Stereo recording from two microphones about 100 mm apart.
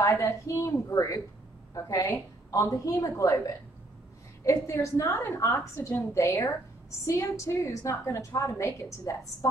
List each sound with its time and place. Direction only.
0.0 s a woman's voice: 30° left (ahead or behind)